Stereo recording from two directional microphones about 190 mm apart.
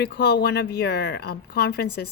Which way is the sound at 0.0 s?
60° left (ahead or behind).